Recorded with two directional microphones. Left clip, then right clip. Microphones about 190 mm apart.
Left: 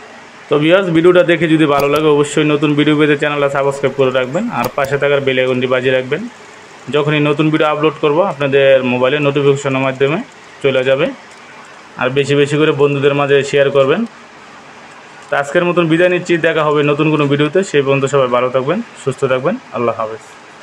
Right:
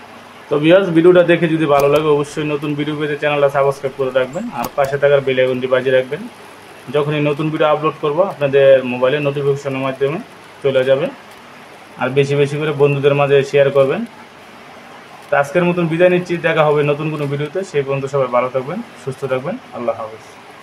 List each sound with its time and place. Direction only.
0.5 s a man's voice: 20° left (ahead or behind)
15.2 s a man's voice: 20° left (ahead or behind)